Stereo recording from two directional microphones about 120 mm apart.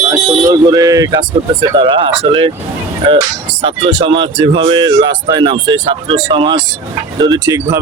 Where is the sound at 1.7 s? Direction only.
45° right (ahead or behind).